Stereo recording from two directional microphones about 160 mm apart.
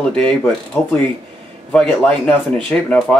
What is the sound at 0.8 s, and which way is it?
Speech, 20° left (ahead or behind).